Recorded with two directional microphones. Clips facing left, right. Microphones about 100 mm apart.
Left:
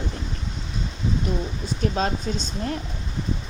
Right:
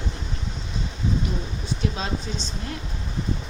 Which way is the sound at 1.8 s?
45° left (ahead or behind).